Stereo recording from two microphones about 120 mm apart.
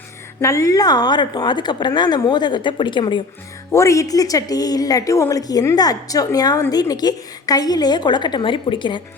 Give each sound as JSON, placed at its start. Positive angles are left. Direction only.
{"t": 0.4, "sound": "a woman's voice", "side_deg": 25}
{"t": 3.7, "sound": "a woman's voice", "side_deg": 25}